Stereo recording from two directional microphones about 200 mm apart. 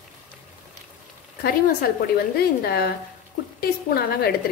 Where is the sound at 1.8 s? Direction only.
50° left (ahead or behind).